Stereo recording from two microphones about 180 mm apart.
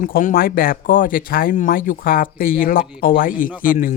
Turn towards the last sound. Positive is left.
turn(degrees=50)  # may be behind; listen again after turning